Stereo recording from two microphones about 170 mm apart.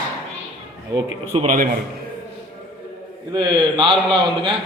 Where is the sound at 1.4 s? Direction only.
50° right (ahead or behind).